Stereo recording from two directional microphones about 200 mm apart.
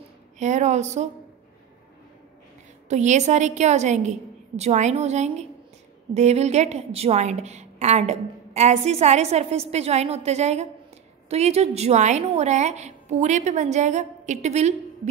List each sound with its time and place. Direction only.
0.4 s a woman's voice: 35° right (ahead or behind)
2.9 s a woman's voice: 35° right (ahead or behind)